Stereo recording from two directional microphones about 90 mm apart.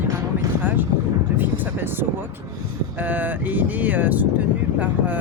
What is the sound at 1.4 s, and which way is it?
Speech, 20° right (ahead or behind).